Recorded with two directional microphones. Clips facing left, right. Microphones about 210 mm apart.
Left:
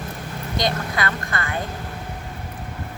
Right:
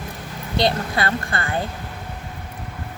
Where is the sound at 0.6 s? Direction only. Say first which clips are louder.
Right 3 dB; 30° right (ahead or behind).